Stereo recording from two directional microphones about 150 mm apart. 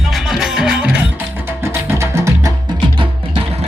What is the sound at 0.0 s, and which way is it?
Music, centre (ahead or behind).